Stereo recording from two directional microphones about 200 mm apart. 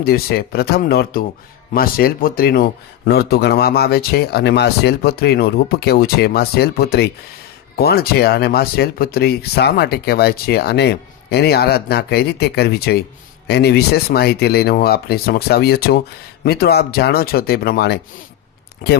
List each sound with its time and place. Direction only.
0.0 s speech: 50° left (ahead or behind)